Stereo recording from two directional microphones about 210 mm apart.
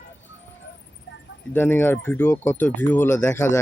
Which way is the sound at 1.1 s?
60° left (ahead or behind).